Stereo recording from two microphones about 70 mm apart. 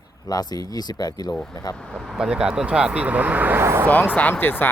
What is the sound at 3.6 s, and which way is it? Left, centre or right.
Speech, right.